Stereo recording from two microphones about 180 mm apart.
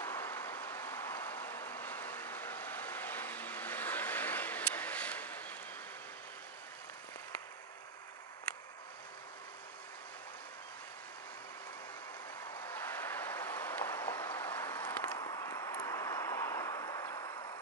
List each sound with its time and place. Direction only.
0.0 s vehicle: 15° left (ahead or behind)
12.6 s vehicle: 10° left (ahead or behind)
15.1 s a sound: 20° left (ahead or behind)